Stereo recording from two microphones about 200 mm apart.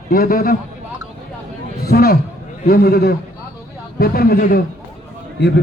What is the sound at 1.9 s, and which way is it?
A man's voice, 50° left (ahead or behind).